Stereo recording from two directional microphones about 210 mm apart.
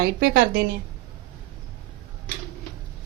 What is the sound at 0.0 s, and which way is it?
Speech, 45° right (ahead or behind).